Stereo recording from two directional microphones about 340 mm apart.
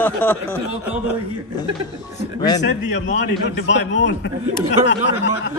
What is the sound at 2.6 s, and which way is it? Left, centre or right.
A man's voice, left.